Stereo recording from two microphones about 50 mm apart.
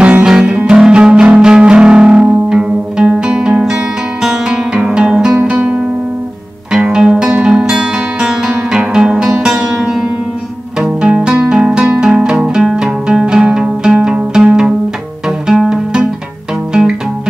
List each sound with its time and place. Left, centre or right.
0.2 s music: centre
5.4 s music: right
6.7 s music: centre